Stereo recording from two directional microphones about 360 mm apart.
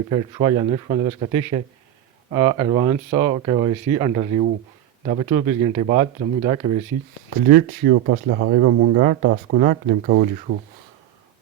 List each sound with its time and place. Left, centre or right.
0.1 s speech: centre
7.4 s speech: right